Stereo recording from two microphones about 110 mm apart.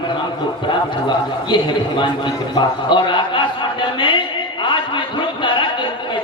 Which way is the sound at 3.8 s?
50° left (ahead or behind).